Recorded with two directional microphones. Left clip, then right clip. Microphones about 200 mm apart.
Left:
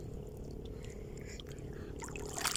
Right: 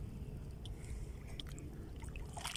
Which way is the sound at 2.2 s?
55° left (ahead or behind).